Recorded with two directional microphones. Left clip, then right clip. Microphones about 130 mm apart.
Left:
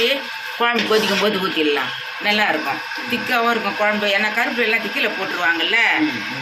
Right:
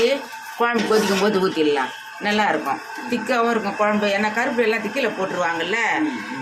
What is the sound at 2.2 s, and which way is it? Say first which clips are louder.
Speech: left 2 dB; 25° right (ahead or behind).